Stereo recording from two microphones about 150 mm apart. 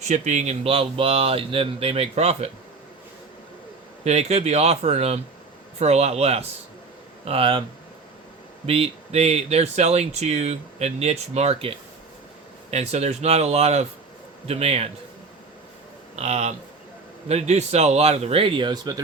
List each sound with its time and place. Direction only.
0.1 s speech: 50° right (ahead or behind)
4.0 s speech: 45° right (ahead or behind)
8.6 s speech: 40° right (ahead or behind)
12.7 s speech: 45° right (ahead or behind)
16.1 s speech: 45° right (ahead or behind); by 18.9 s 30° right (ahead or behind)